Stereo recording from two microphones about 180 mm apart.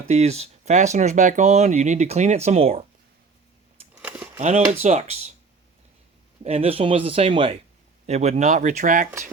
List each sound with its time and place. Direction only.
0.1 s speech: 35° right (ahead or behind)
4.4 s speech: 40° right (ahead or behind)
6.4 s speech: 35° right (ahead or behind)